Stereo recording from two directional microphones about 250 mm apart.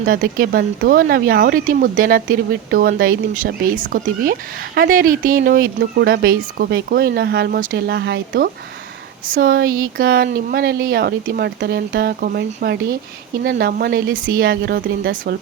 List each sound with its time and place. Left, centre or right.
0.0 s speech: right